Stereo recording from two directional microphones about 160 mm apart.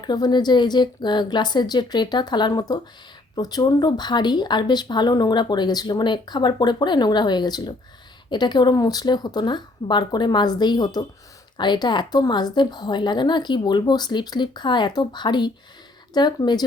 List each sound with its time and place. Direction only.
0.0 s speech: 25° left (ahead or behind)